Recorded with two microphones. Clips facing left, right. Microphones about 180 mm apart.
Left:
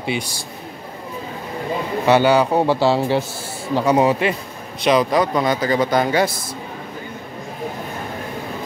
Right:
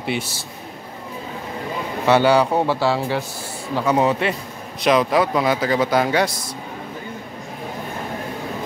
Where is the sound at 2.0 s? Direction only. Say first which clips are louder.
Left 1 dB; 5° left (ahead or behind).